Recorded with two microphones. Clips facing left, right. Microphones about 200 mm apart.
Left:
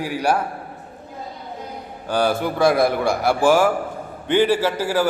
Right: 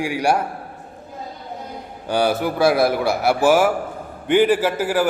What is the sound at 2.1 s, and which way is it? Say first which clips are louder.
A man's voice: right 1 dB; 10° right (ahead or behind).